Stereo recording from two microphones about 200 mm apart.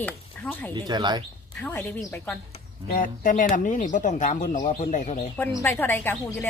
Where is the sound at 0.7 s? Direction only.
20° right (ahead or behind).